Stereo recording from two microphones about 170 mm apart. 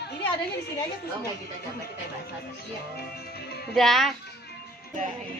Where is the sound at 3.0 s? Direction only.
70° left (ahead or behind).